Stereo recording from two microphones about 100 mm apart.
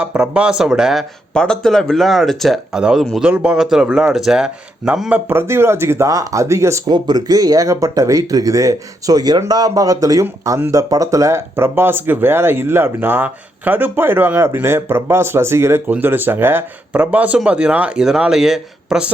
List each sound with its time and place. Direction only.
0.0 s speech: 15° right (ahead or behind)
1.3 s speech: 5° left (ahead or behind); by 5.2 s 15° right (ahead or behind)
5.3 s speech: 25° right (ahead or behind)
6.8 s speech: 45° right (ahead or behind); by 19.1 s 5° right (ahead or behind)